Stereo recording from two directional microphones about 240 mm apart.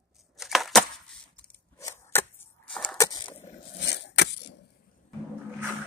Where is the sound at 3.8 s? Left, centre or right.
Left.